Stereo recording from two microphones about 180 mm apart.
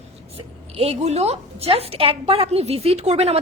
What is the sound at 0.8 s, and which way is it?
A woman's voice, 35° right (ahead or behind).